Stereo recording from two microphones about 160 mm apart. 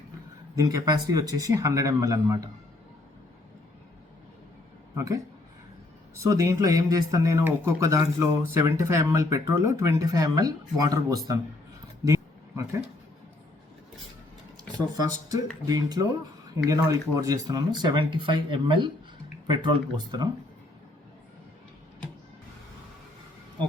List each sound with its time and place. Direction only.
0.5 s speech: 25° right (ahead or behind)
4.9 s speech: 20° right (ahead or behind)
12.0 s a sound: 20° right (ahead or behind)
14.7 s speech: 25° right (ahead or behind)